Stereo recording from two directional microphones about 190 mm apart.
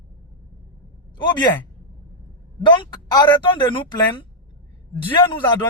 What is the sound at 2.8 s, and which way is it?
Speech, 25° left (ahead or behind).